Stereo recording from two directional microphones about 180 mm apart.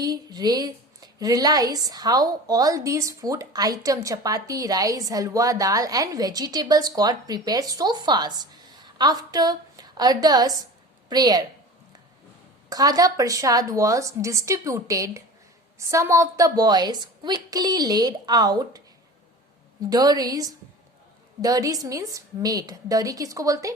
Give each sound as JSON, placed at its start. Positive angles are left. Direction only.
{"t": 0.0, "sound": "a woman's voice", "side_deg": -20}
{"t": 12.7, "sound": "a woman's voice", "side_deg": -20}
{"t": 19.9, "sound": "a woman's voice", "side_deg": -20}